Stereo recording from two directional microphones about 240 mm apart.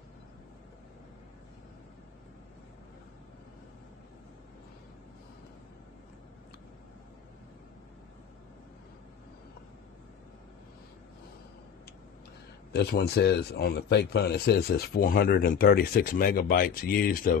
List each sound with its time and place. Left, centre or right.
12.7 s speech: left